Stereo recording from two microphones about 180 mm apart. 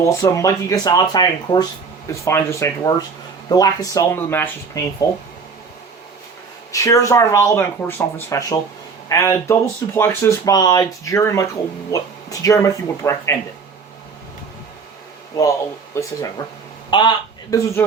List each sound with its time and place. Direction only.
0.0 s speech: 15° left (ahead or behind)
6.7 s speech: 20° left (ahead or behind)
15.3 s a man's voice: 20° left (ahead or behind)